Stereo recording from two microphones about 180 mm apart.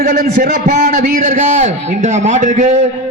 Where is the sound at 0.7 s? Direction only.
45° right (ahead or behind).